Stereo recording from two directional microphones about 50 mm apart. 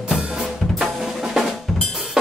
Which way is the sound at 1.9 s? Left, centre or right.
Centre.